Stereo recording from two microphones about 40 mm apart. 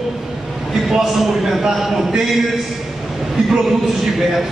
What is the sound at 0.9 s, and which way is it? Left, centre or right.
A man's voice, centre.